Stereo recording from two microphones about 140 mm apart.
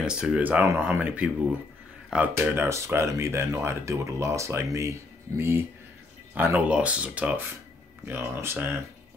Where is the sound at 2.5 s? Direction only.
15° right (ahead or behind).